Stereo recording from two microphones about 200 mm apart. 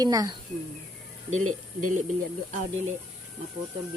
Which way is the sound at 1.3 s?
90° right.